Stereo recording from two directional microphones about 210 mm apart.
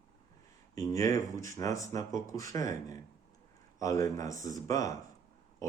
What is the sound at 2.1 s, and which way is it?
Speech, 35° right (ahead or behind).